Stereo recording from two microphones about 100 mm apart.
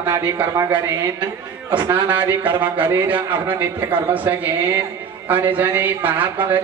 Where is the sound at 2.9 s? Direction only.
20° right (ahead or behind).